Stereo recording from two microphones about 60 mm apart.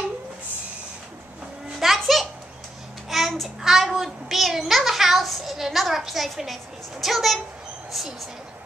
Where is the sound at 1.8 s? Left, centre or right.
Centre.